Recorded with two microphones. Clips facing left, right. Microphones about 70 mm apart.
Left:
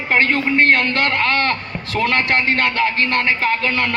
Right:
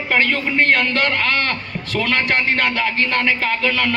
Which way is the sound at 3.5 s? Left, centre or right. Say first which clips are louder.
Even; left.